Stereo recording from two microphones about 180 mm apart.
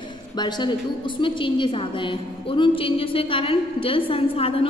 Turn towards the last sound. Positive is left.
turn(degrees=30)  # may be behind; listen again after turning